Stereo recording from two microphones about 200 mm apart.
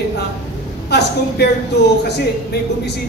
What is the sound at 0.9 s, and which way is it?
Speech, 55° left (ahead or behind).